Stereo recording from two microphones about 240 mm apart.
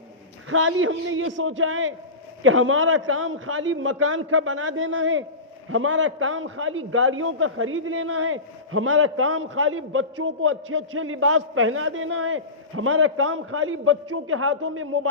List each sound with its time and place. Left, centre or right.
0.5 s a man's voice: right